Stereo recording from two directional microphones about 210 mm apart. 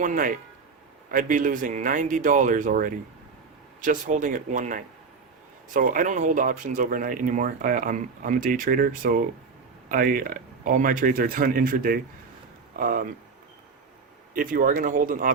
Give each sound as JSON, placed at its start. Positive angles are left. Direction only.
{"t": 0.0, "sound": "speech", "side_deg": -40}
{"t": 14.3, "sound": "speech", "side_deg": -40}